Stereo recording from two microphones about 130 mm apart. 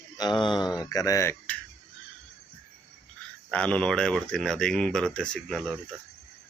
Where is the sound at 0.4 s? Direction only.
35° left (ahead or behind).